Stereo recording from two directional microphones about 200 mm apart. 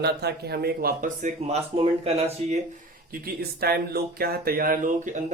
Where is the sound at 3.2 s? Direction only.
50° right (ahead or behind).